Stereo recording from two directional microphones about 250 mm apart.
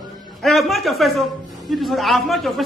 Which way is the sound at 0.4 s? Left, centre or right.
Centre.